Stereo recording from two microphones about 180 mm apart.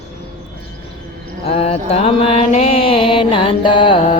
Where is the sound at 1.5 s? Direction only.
35° left (ahead or behind).